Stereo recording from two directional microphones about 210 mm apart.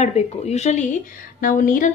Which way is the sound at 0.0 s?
30° left (ahead or behind).